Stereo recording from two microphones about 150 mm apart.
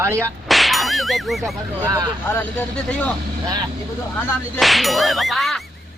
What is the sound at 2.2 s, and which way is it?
Speech, 10° left (ahead or behind).